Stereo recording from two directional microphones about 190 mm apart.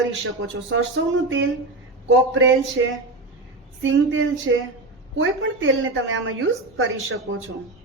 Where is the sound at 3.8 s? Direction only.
85° right.